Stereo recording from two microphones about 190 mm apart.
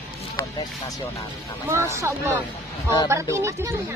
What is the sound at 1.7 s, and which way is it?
Speech, 15° right (ahead or behind).